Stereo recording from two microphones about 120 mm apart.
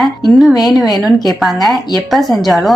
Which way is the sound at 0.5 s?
30° left (ahead or behind).